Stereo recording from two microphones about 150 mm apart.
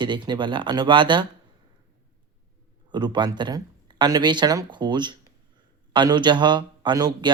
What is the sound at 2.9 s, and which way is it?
A man's voice, 30° right (ahead or behind).